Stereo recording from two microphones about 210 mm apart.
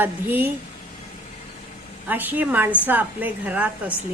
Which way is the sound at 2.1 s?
10° right (ahead or behind).